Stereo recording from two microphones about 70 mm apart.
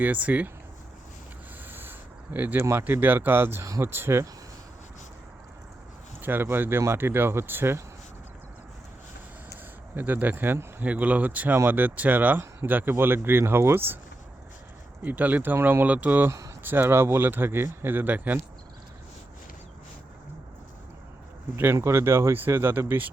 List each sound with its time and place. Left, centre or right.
0.0 s speech: right
1.6 s a sound: right
2.6 s speech: right
2.8 s speech: right
3.6 s speech: right
3.8 s speech: right
6.2 s speech: right
9.9 s speech: right
15.0 s speech: right
21.5 s speech: right